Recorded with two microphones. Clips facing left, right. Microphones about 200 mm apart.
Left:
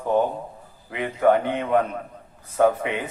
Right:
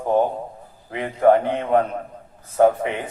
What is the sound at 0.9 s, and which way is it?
Speech, 40° right (ahead or behind).